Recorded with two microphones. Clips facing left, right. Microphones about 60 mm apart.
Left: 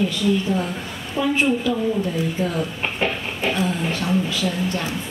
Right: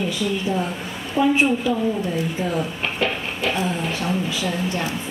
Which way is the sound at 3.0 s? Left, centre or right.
Left.